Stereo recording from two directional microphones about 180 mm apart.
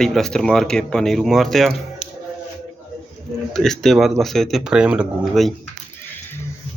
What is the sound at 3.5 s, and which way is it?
Speech, centre (ahead or behind).